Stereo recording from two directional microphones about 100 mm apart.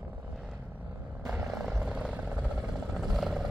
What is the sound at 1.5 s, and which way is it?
Vehicle, 5° right (ahead or behind).